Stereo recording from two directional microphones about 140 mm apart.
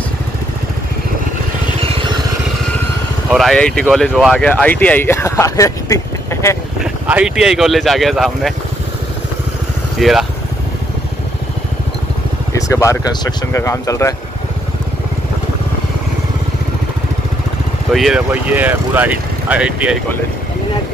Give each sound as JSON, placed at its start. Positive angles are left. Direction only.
{"t": 3.3, "sound": "speech", "side_deg": 0}
{"t": 4.4, "sound": "speech", "side_deg": 10}
{"t": 7.1, "sound": "speech", "side_deg": -5}
{"t": 9.9, "sound": "speech", "side_deg": 0}
{"t": 12.5, "sound": "speech", "side_deg": 20}
{"t": 17.9, "sound": "speech", "side_deg": -5}